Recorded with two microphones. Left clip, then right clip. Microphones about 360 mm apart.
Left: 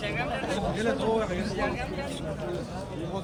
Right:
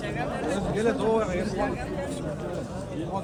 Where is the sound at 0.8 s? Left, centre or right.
Right.